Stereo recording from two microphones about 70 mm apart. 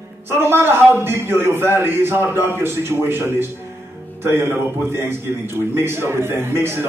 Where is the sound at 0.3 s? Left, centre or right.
Right.